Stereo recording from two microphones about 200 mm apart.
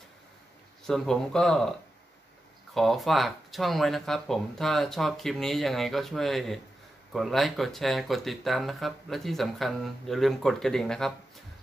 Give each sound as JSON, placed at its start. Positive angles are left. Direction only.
{"t": 0.8, "sound": "speech", "side_deg": 0}